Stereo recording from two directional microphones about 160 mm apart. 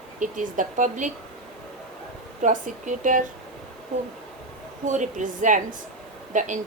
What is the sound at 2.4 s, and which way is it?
Speech, 50° right (ahead or behind).